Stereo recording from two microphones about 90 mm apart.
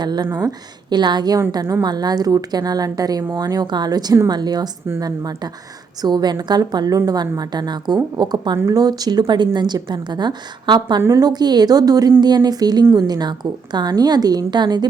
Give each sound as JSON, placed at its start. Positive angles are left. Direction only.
{"t": 0.0, "sound": "a woman's voice", "side_deg": -50}